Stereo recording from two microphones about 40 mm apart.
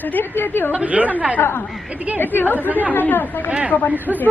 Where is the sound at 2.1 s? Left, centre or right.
Left.